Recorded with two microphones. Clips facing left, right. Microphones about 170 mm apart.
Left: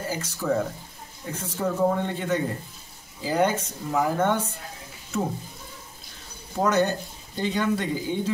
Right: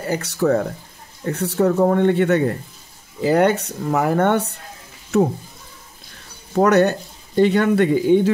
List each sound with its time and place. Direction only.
0.0 s speech: 70° right (ahead or behind)
6.5 s speech: 70° right (ahead or behind)